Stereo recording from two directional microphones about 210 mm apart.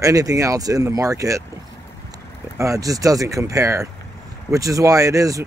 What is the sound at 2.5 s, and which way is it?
Speech, 15° right (ahead or behind).